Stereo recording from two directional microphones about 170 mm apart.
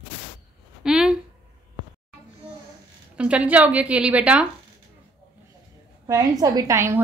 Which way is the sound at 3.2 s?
5° right (ahead or behind).